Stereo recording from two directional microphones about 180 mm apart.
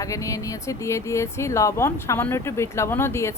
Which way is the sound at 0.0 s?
15° left (ahead or behind).